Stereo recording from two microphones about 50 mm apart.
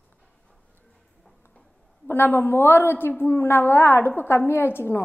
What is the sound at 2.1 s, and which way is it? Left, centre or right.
A woman's voice, left.